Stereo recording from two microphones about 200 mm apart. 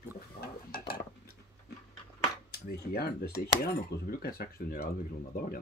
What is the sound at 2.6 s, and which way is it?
Speech, 50° left (ahead or behind).